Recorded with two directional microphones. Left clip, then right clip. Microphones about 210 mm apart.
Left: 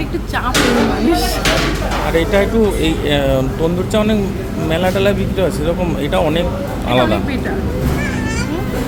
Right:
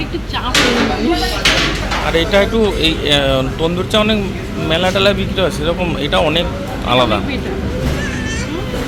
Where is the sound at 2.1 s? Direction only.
5° left (ahead or behind).